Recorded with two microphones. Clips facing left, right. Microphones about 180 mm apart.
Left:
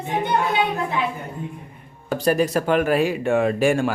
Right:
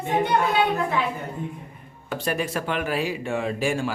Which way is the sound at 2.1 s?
40° left (ahead or behind).